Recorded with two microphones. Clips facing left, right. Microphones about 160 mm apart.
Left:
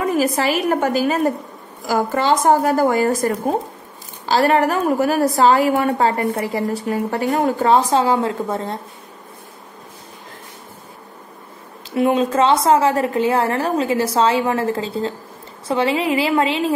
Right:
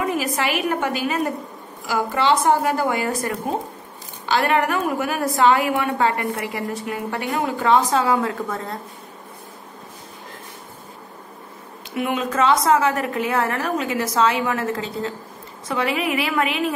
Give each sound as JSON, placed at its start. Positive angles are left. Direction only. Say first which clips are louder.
{"t": 0.0, "sound": "a woman's voice", "louder": "left 5 dB", "side_deg": 35}
{"t": 11.9, "sound": "a woman's voice", "louder": "left 7 dB", "side_deg": 30}